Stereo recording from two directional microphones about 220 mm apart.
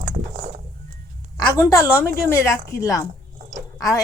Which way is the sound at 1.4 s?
15° left (ahead or behind).